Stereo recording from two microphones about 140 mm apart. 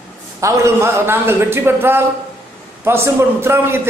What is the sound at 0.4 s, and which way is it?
A man's voice, 15° right (ahead or behind).